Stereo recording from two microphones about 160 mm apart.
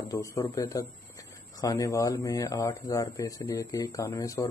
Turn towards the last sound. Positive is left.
turn(degrees=20)  # may be behind; listen again after turning